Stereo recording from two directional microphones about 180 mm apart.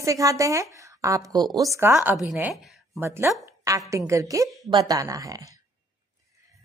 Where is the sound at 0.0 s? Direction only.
15° right (ahead or behind).